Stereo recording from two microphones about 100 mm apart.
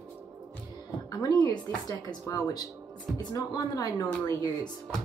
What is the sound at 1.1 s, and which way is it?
Speech, 40° left (ahead or behind).